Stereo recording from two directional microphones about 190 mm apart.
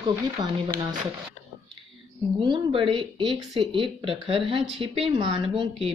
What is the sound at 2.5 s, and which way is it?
Speech, 25° right (ahead or behind).